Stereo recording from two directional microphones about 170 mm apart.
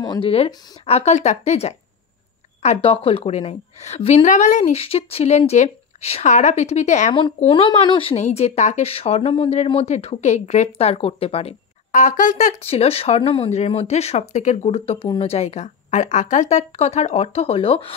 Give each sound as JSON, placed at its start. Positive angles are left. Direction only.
{"t": 0.0, "sound": "speech", "side_deg": 25}
{"t": 0.8, "sound": "a woman's voice", "side_deg": 40}
{"t": 7.3, "sound": "a woman's voice", "side_deg": 35}